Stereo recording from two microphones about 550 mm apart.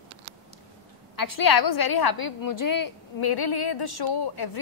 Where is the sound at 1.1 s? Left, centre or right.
Left.